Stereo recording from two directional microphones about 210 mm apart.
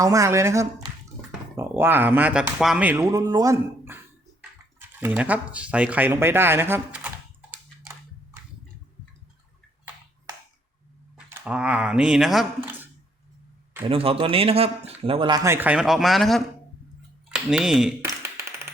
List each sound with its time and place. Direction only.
0.0 s speech: 15° right (ahead or behind)
11.4 s speech: 5° right (ahead or behind)
13.8 s speech: 25° right (ahead or behind)
15.4 s speech: 10° right (ahead or behind)
18.0 s tap: 10° right (ahead or behind)